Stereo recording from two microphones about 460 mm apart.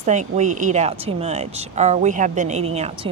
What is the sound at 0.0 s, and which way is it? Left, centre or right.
Speech, centre.